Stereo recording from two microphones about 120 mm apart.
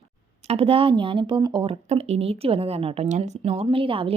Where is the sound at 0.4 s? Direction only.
50° right (ahead or behind); by 1.7 s 35° right (ahead or behind).